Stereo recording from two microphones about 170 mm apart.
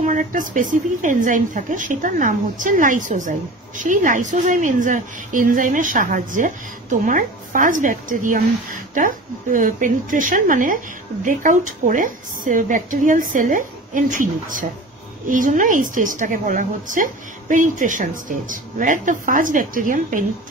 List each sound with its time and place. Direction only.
0.0 s speech: 50° right (ahead or behind)